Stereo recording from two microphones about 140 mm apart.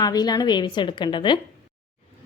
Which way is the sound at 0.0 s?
30° left (ahead or behind).